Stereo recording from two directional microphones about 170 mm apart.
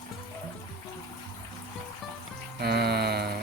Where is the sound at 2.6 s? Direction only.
70° right (ahead or behind).